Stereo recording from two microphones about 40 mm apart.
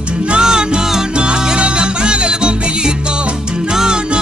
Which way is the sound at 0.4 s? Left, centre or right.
Centre.